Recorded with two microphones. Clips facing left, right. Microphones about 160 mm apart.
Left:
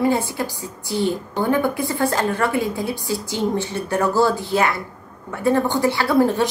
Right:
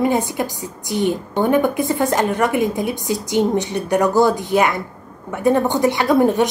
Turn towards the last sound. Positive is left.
turn(degrees=-20)  # may be behind; listen again after turning